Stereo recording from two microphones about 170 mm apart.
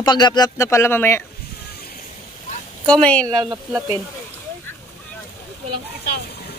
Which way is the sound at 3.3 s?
25° right (ahead or behind).